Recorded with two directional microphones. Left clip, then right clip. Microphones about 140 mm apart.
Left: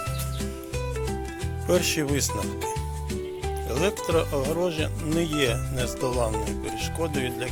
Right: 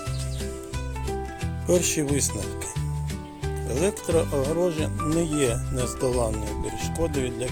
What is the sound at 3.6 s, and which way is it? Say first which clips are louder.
Speech: even; 55° right (ahead or behind).